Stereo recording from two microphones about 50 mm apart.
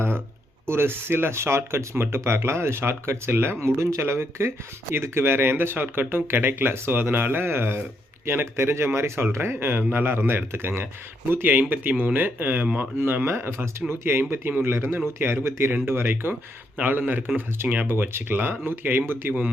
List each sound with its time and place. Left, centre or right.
0.7 s speech: right
3.6 s speech: right
7.4 s speech: right
13.2 s speech: right
15.7 s speech: right
16.7 s speech: right